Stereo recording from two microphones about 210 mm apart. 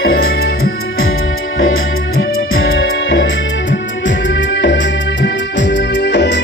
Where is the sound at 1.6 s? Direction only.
70° left (ahead or behind).